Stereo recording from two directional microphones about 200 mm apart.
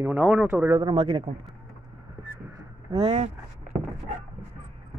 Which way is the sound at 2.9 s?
30° right (ahead or behind).